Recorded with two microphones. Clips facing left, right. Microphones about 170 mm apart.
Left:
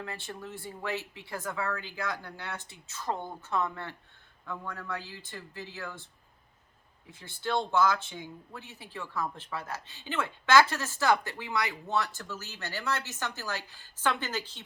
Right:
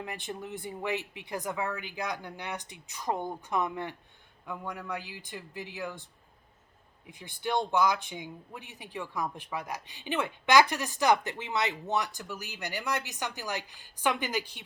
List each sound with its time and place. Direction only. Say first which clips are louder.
0.0 s speech: right 2 dB; 15° right (ahead or behind)
7.1 s speech: even; 15° right (ahead or behind)